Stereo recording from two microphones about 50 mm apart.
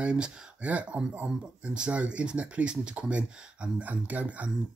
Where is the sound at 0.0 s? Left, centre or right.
Right.